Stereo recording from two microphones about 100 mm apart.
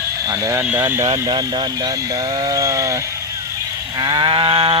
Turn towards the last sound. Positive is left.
turn(degrees=-65)  # may be behind; listen again after turning